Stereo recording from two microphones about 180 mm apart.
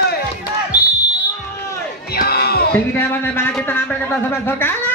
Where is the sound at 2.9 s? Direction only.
10° left (ahead or behind).